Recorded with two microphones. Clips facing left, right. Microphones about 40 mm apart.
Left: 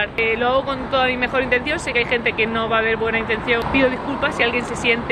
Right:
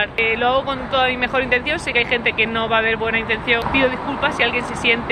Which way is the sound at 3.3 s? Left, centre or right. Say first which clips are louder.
Right 1 dB; right.